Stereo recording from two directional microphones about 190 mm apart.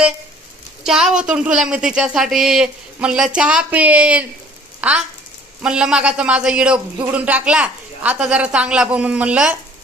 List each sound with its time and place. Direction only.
0.9 s a man's voice: centre (ahead or behind)